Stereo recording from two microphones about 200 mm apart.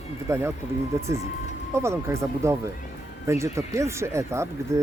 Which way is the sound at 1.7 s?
15° right (ahead or behind).